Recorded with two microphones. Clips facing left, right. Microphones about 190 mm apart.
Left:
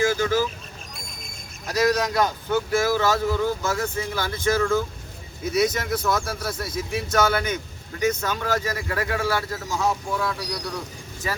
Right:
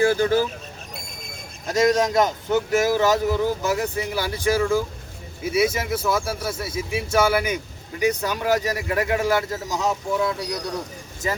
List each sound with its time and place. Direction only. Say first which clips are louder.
0.0 s speech: right 3 dB; 35° right (ahead or behind)
1.6 s speech: right 3 dB; 25° right (ahead or behind)